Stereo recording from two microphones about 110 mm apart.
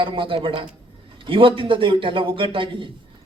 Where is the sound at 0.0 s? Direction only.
50° right (ahead or behind).